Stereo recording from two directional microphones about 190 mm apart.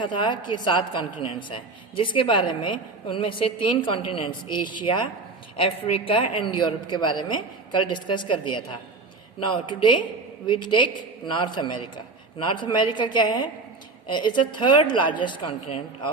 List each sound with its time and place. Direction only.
0.0 s speech: 25° left (ahead or behind)